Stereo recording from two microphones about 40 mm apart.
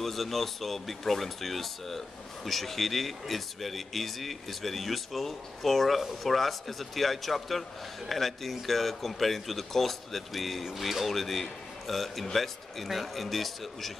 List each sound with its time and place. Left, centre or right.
0.0 s speech: centre